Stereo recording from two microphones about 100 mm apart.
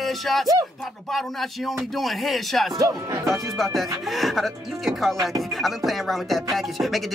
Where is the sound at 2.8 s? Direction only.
35° right (ahead or behind).